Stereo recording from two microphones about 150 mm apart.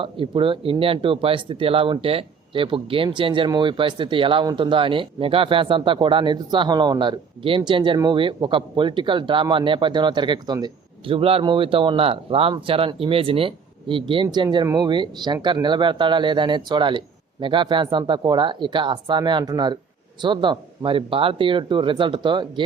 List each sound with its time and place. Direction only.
0.0 s speech: 35° right (ahead or behind)